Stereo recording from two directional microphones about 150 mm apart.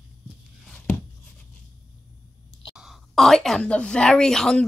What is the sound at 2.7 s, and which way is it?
Speech, centre (ahead or behind).